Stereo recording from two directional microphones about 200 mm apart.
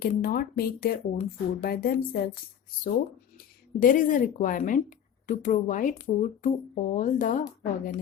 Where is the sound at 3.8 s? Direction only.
40° left (ahead or behind).